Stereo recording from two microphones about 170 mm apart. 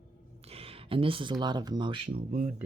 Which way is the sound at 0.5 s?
35° right (ahead or behind).